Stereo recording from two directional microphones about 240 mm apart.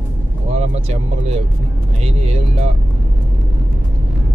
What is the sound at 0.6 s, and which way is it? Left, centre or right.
Speech, right.